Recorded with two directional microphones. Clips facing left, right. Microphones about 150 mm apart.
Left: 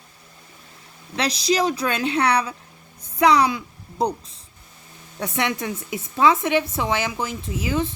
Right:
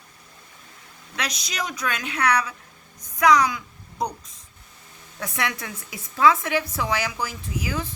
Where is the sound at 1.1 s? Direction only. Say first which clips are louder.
Left 10 dB; 30° left (ahead or behind).